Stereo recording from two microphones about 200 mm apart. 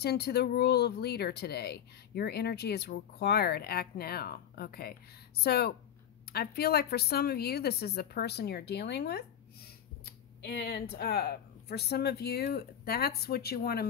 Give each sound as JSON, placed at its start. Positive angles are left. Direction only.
{"t": 0.0, "sound": "speech", "side_deg": 55}